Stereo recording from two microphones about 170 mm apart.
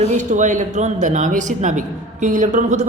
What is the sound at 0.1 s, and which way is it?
A woman's voice, 45° right (ahead or behind).